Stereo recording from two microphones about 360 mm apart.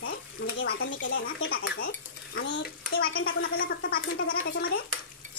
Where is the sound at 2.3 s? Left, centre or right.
Left.